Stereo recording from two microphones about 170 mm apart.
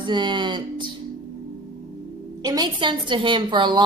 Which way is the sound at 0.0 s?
25° right (ahead or behind).